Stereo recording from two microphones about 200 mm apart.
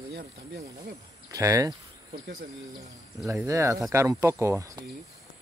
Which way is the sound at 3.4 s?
15° right (ahead or behind).